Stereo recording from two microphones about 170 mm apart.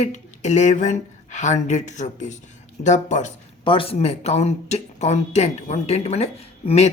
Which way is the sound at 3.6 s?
30° left (ahead or behind).